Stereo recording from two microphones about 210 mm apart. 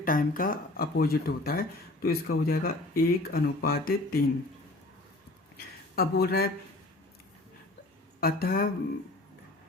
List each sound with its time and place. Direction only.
0.0 s speech: 40° left (ahead or behind)
6.0 s speech: 45° left (ahead or behind)
8.2 s speech: 45° left (ahead or behind)